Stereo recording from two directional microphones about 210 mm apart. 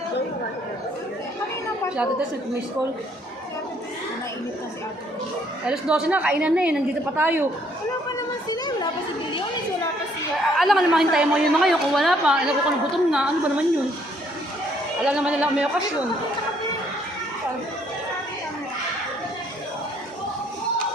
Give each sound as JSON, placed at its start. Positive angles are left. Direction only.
{"t": 5.6, "sound": "a woman's voice", "side_deg": -5}
{"t": 8.4, "sound": "speech", "side_deg": 20}
{"t": 10.6, "sound": "a woman's voice", "side_deg": 0}
{"t": 15.0, "sound": "a woman's voice", "side_deg": -5}